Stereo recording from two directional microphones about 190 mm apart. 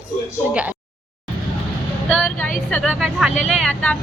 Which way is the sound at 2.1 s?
5° left (ahead or behind).